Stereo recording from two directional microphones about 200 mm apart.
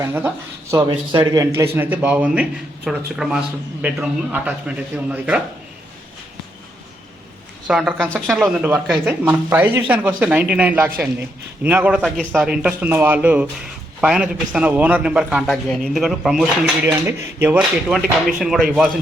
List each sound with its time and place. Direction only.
0.0 s a man's voice: 10° right (ahead or behind)
0.8 s a man's voice: 25° right (ahead or behind); by 5.4 s 5° right (ahead or behind)
7.7 s a man's voice: centre (ahead or behind)
16.8 s speech: 15° right (ahead or behind)